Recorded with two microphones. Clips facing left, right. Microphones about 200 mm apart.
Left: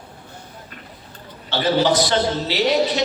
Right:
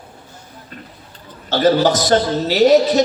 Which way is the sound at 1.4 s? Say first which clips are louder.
Right 4 dB; 45° right (ahead or behind).